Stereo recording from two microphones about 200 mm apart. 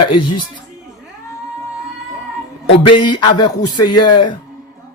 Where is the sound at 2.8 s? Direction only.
20° left (ahead or behind).